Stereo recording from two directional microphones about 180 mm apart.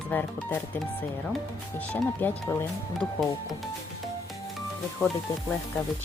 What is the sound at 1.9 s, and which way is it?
Speech, 10° left (ahead or behind).